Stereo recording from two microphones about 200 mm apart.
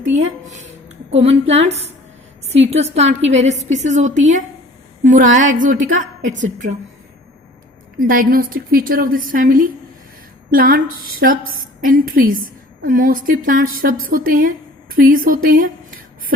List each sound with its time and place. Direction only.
1.1 s a woman's voice: 30° right (ahead or behind)
2.8 s a woman's voice: 30° right (ahead or behind)
7.9 s a woman's voice: 45° right (ahead or behind)